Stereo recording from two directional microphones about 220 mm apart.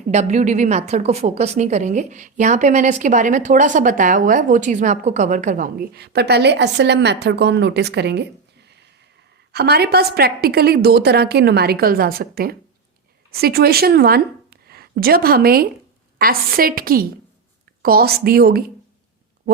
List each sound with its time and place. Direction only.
0.1 s a woman's voice: 30° right (ahead or behind); by 8.3 s 50° right (ahead or behind)
9.5 s a woman's voice: 45° right (ahead or behind)